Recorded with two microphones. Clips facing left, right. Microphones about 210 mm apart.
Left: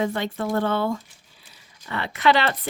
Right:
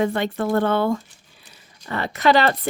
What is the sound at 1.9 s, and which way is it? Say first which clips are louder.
Speech: right 2 dB; 40° right (ahead or behind).